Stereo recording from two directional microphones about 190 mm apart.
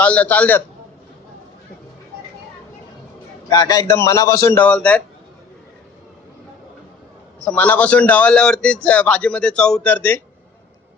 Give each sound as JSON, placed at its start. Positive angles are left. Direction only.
{"t": 0.0, "sound": "a man's voice", "side_deg": 5}
{"t": 3.5, "sound": "a man's voice", "side_deg": 20}
{"t": 7.3, "sound": "a man's voice", "side_deg": 5}